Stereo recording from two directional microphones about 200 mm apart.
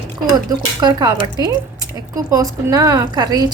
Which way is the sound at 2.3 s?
15° right (ahead or behind).